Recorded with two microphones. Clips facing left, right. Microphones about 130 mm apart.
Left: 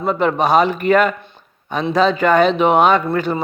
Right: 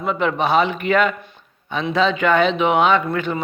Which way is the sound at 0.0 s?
40° left (ahead or behind).